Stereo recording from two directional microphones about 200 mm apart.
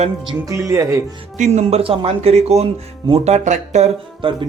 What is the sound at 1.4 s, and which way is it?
Speech, 35° right (ahead or behind).